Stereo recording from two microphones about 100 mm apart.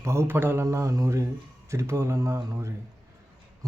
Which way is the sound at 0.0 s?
30° right (ahead or behind).